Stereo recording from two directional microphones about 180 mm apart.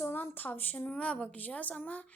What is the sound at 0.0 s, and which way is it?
A woman's voice, 10° left (ahead or behind).